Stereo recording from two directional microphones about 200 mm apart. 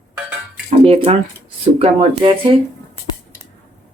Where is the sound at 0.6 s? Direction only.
30° right (ahead or behind).